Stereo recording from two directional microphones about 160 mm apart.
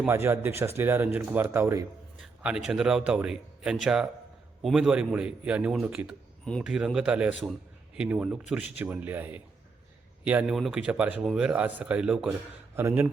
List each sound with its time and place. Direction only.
0.1 s speech: 15° right (ahead or behind)
2.2 s a man's voice: 5° right (ahead or behind)